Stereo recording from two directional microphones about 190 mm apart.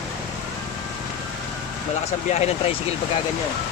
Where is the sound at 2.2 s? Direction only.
35° left (ahead or behind).